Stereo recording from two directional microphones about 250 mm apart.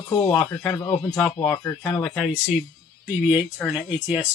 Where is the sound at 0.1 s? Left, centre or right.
Centre.